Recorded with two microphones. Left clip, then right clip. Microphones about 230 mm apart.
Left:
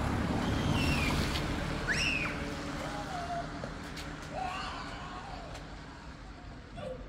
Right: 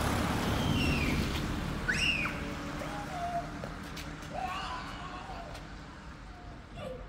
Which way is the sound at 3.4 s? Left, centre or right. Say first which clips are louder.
Even; left.